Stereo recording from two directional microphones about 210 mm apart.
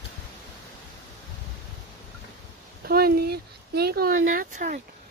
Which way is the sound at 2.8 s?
45° right (ahead or behind).